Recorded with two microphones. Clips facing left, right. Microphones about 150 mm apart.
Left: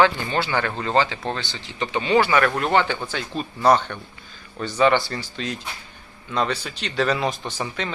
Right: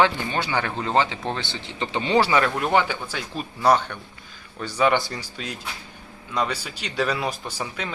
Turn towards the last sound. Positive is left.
turn(degrees=-10)  # may be behind; listen again after turning